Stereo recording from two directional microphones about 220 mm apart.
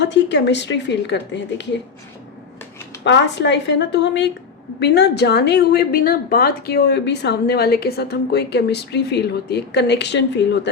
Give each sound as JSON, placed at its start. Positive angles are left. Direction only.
{"t": 0.0, "sound": "a woman's voice", "side_deg": 50}
{"t": 3.0, "sound": "a woman's voice", "side_deg": 55}